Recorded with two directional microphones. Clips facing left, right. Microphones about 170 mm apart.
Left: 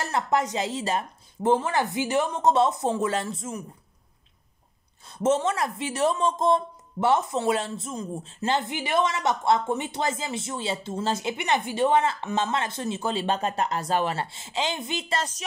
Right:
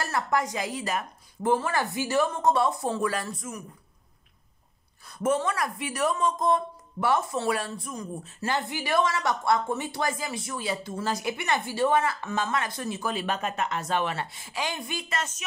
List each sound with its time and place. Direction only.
0.0 s a woman's voice: 20° left (ahead or behind)
5.0 s a woman's voice: 25° left (ahead or behind)